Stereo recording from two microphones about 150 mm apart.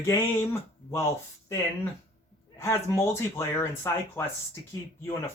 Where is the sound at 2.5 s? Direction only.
20° left (ahead or behind).